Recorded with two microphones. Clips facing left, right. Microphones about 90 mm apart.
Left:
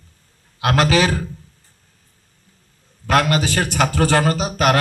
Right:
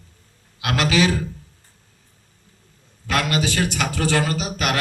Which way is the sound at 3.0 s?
45° left (ahead or behind).